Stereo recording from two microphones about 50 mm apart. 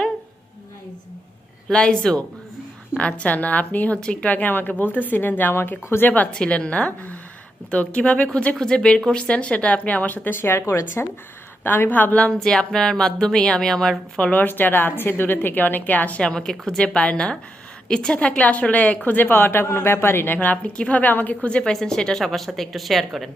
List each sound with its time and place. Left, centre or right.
1.6 s music: centre
3.0 s a woman's voice: left
6.0 s a woman's voice: left
6.3 s speech: centre; by 10.3 s left
10.4 s speech: left
11.6 s a woman's voice: left
12.3 s music: centre
14.2 s speech: left
14.4 s a woman's voice: left
16.2 s speech: centre; by 18.9 s left
19.0 s speech: left
20.7 s a woman's voice: left
21.6 s speech: centre